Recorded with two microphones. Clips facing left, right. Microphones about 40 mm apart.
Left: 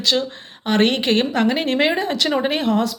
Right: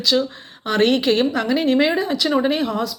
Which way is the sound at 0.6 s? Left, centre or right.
Left.